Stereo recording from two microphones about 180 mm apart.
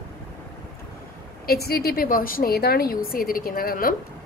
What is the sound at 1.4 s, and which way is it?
A woman's voice, 60° left (ahead or behind).